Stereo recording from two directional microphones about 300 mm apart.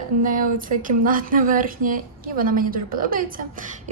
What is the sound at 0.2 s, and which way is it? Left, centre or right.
A woman's voice, right.